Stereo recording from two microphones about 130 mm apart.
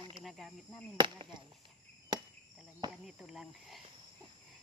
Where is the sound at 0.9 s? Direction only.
35° right (ahead or behind).